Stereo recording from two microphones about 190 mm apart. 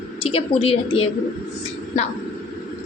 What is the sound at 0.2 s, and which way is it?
Speech, 30° left (ahead or behind).